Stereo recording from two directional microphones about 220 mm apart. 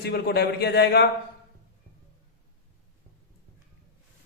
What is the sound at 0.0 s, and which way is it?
A man's voice, 45° left (ahead or behind).